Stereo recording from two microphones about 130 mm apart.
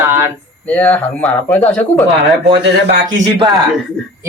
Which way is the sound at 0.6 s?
10° left (ahead or behind).